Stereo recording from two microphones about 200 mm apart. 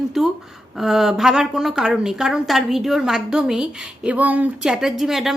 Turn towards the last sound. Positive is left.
turn(degrees=0)  # may be behind; listen again after turning